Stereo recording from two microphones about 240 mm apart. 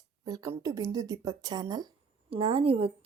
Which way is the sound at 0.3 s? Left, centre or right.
Centre.